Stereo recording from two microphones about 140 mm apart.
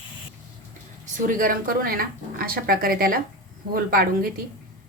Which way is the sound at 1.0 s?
75° right (ahead or behind).